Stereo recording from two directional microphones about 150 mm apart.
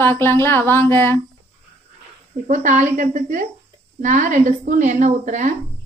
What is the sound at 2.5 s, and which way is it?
A woman's voice, 55° right (ahead or behind).